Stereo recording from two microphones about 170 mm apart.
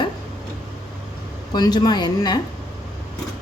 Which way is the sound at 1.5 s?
25° left (ahead or behind).